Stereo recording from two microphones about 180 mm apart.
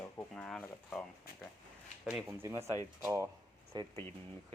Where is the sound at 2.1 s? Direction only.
Centre (ahead or behind).